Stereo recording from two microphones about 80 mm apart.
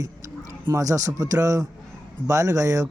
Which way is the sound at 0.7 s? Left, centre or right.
Right.